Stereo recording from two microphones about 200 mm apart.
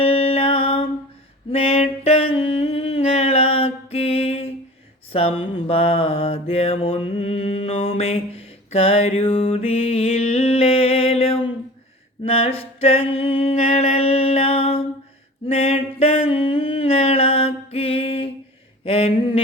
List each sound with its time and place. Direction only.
0.0 s music: 30° left (ahead or behind)
1.5 s a sound: 30° left (ahead or behind)
2.3 s mantra: 30° left (ahead or behind)